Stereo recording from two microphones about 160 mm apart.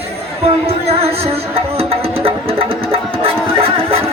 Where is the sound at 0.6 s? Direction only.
40° right (ahead or behind).